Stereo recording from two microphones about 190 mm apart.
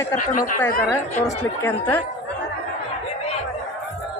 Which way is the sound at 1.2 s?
10° left (ahead or behind).